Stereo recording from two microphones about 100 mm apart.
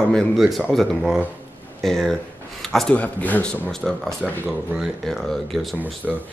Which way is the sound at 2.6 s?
5° left (ahead or behind).